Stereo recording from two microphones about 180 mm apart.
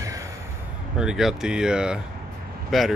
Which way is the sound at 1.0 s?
5° right (ahead or behind).